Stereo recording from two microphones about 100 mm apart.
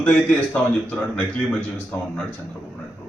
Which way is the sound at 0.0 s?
15° left (ahead or behind).